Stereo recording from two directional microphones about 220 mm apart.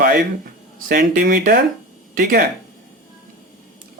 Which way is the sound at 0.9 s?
40° right (ahead or behind).